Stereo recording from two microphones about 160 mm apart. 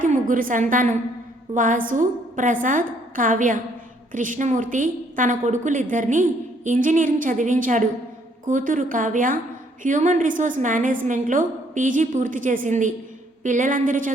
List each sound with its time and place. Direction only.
0.0 s a woman's voice: 55° right (ahead or behind)